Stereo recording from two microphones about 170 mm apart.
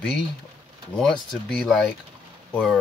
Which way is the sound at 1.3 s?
5° left (ahead or behind).